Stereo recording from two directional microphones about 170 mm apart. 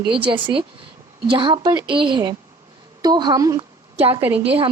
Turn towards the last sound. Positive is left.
turn(degrees=-10)  # may be behind; listen again after turning